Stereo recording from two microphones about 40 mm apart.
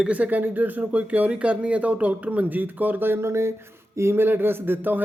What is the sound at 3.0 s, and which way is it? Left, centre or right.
Speech, right.